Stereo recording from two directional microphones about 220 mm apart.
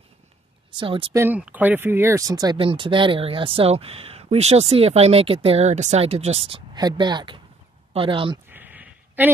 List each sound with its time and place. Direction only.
0.7 s speech: 25° right (ahead or behind)
1.1 s speech: 10° right (ahead or behind)
8.5 s a sound: 10° right (ahead or behind)